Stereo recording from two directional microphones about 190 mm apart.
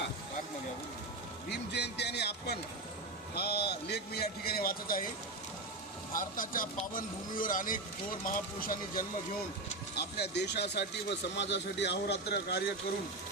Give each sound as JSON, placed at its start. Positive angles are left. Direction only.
{"t": 1.5, "sound": "a man's voice", "side_deg": 60}
{"t": 6.1, "sound": "a man's voice", "side_deg": 45}
{"t": 9.9, "sound": "a man's voice", "side_deg": 60}